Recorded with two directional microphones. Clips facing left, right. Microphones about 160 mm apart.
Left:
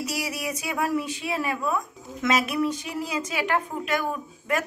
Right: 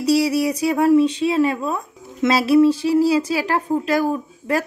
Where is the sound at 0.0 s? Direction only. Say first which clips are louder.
Right 13 dB; 30° right (ahead or behind).